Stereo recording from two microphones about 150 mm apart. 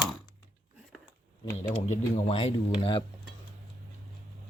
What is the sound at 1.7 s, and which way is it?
Speech, 40° left (ahead or behind).